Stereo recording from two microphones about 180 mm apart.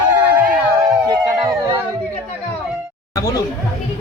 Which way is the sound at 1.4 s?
20° right (ahead or behind).